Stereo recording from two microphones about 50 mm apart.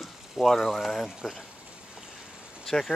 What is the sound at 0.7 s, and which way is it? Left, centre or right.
Speech, centre.